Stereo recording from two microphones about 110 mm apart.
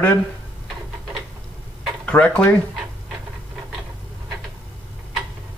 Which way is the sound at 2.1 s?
15° left (ahead or behind).